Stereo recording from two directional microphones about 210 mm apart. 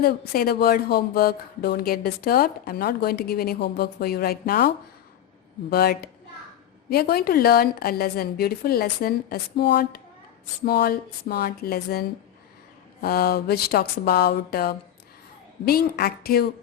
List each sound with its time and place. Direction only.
0.0 s speech: 45° left (ahead or behind)
5.7 s speech: 45° left (ahead or behind)